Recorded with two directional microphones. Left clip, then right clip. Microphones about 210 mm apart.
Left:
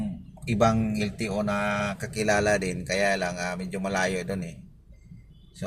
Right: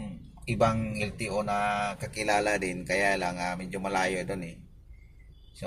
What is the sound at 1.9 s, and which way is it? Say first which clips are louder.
Speech: left 2 dB; 15° left (ahead or behind).